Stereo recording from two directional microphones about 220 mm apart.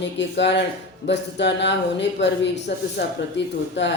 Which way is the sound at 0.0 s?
55° left (ahead or behind).